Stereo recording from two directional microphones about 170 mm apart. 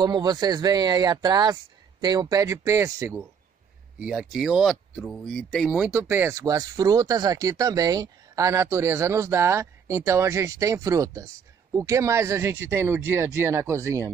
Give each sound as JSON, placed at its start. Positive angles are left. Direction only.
{"t": 0.0, "sound": "speech", "side_deg": -25}
{"t": 5.9, "sound": "speech", "side_deg": -10}